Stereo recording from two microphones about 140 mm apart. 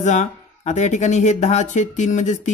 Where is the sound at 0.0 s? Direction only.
60° left (ahead or behind).